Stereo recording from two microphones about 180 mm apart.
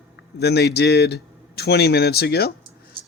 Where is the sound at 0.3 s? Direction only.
65° left (ahead or behind).